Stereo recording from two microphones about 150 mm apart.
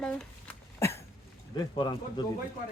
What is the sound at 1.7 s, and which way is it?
Speech, 30° left (ahead or behind).